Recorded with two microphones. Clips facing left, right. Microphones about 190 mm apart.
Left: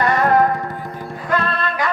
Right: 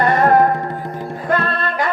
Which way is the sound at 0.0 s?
50° right (ahead or behind).